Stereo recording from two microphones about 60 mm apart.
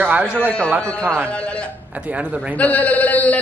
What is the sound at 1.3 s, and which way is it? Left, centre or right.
Speech, centre.